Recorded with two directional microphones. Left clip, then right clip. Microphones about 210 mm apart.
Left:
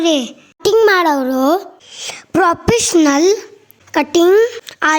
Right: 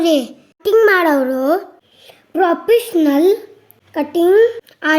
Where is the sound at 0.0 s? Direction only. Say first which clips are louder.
Even; 40° left (ahead or behind).